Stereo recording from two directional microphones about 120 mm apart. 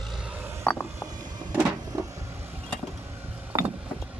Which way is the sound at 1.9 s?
25° right (ahead or behind).